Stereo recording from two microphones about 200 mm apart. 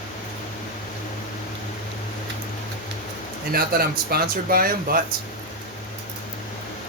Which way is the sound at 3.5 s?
50° right (ahead or behind).